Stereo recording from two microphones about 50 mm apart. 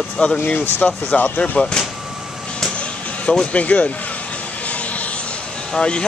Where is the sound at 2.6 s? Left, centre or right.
Left.